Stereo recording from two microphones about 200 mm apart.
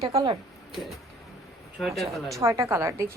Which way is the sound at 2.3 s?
15° right (ahead or behind).